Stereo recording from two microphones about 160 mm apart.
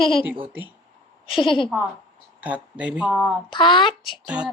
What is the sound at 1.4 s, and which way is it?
Speech, 30° left (ahead or behind).